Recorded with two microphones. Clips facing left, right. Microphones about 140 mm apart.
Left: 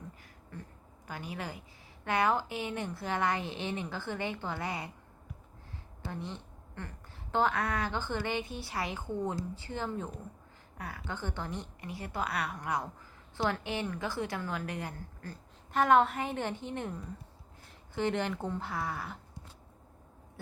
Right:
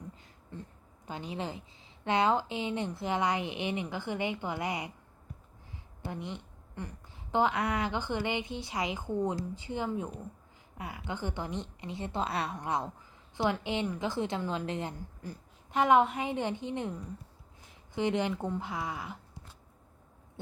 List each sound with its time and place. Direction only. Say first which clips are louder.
0.5 s a woman's voice: right 2 dB; 20° right (ahead or behind)
6.1 s a woman's voice: right 2 dB; 15° right (ahead or behind)
17.9 s a woman's voice: right 2 dB; 15° right (ahead or behind)